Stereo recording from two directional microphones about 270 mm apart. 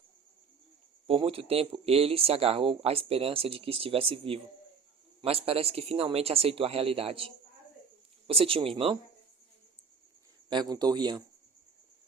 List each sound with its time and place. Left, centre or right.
1.0 s speech: centre
8.3 s speech: right
10.5 s speech: centre